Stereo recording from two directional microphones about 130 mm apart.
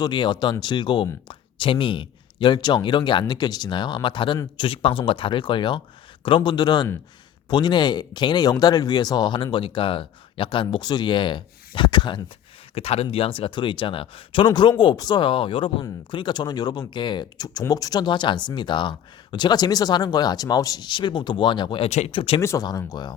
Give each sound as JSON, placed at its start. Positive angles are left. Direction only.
{"t": 0.0, "sound": "speech", "side_deg": 35}
{"t": 12.7, "sound": "speech", "side_deg": 50}
{"t": 21.8, "sound": "speech", "side_deg": 60}
{"t": 22.1, "sound": "speech", "side_deg": 45}
{"t": 22.4, "sound": "speech", "side_deg": 25}